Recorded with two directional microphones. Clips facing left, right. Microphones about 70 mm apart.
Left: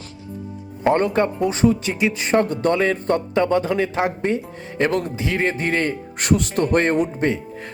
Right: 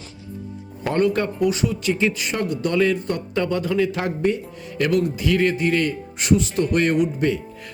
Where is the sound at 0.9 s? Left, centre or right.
Left.